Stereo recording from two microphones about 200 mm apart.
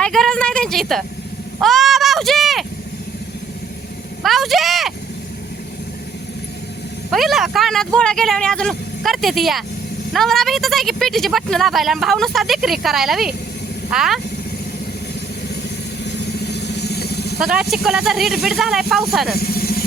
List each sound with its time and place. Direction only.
0.0 s a sound: centre (ahead or behind)
4.2 s vehicle: centre (ahead or behind)
7.1 s speech: centre (ahead or behind)
16.5 s vehicle: 60° left (ahead or behind)
17.4 s speech: 5° right (ahead or behind)
19.4 s vehicle: 50° left (ahead or behind)